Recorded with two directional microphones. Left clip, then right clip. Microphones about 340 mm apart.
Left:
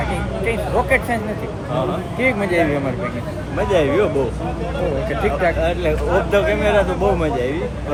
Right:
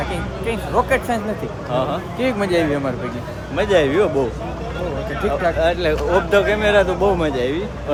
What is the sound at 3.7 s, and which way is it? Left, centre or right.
Speech, right.